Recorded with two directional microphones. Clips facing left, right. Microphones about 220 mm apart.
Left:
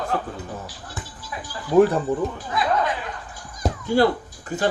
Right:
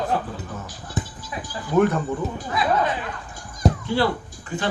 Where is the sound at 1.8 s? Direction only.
35° left (ahead or behind).